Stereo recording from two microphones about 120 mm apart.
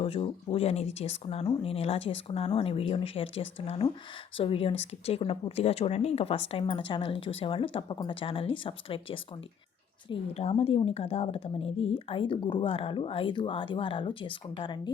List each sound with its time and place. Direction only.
0.0 s speech: 50° left (ahead or behind)
1.5 s a woman's voice: 50° left (ahead or behind)